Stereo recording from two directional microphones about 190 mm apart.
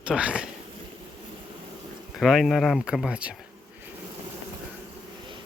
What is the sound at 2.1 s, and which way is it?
Speech, centre (ahead or behind).